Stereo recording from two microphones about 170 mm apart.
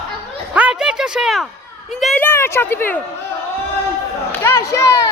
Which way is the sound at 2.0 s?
10° left (ahead or behind).